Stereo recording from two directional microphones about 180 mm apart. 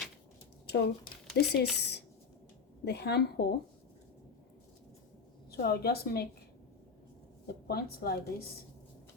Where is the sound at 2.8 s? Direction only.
65° left (ahead or behind).